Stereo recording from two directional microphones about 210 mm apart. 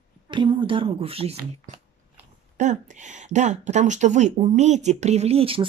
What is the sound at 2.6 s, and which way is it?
Speech, 35° right (ahead or behind).